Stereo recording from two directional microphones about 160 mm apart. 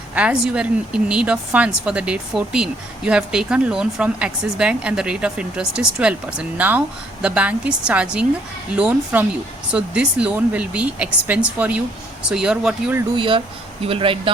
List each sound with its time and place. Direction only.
0.1 s a woman's voice: 10° right (ahead or behind)
13.1 s speech: 30° right (ahead or behind)